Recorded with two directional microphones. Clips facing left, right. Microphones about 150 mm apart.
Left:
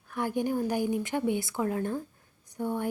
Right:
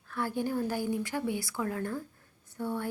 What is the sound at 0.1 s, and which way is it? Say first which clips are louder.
A woman's voice: left 3 dB; 15° left (ahead or behind).